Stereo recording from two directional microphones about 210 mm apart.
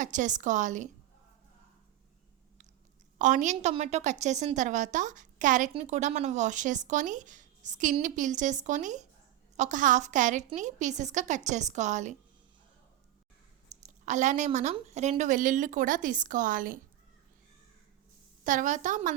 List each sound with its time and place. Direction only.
0.0 s a woman's voice: 35° right (ahead or behind)
3.2 s a woman's voice: 35° right (ahead or behind)
13.7 s a woman's voice: 35° right (ahead or behind)
18.4 s a woman's voice: 35° right (ahead or behind)